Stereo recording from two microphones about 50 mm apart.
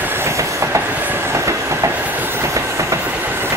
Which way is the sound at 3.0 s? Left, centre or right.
Right.